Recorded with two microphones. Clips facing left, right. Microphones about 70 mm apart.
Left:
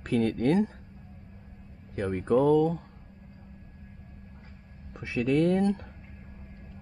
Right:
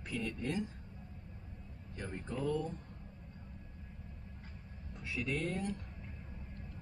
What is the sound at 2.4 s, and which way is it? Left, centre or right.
Speech, left.